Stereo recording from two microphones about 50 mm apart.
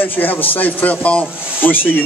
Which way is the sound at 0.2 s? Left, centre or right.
Left.